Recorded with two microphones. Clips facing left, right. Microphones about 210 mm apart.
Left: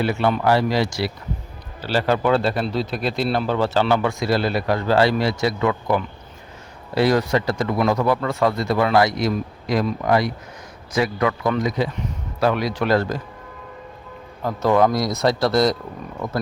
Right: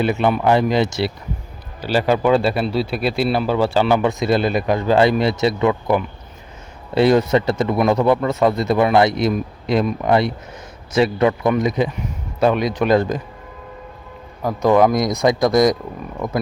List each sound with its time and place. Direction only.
0.0 s speech: 20° right (ahead or behind)
14.4 s speech: 15° right (ahead or behind)